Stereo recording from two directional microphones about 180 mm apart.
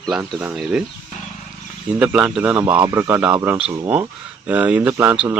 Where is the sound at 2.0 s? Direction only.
5° right (ahead or behind).